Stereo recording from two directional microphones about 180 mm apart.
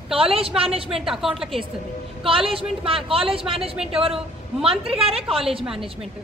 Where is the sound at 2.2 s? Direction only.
30° right (ahead or behind).